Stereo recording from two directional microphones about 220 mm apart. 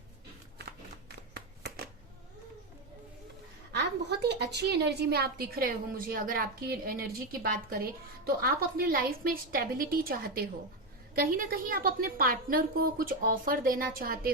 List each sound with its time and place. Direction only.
0.6 s shuffling cards: 50° right (ahead or behind)
3.8 s a woman's voice: 50° right (ahead or behind)